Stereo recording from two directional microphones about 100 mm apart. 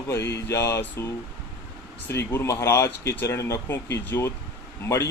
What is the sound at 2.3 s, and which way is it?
Speech, 30° left (ahead or behind).